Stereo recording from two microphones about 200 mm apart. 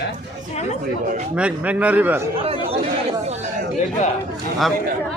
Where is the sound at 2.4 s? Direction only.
30° right (ahead or behind).